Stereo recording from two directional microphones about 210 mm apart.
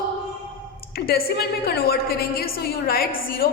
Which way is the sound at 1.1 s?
45° left (ahead or behind).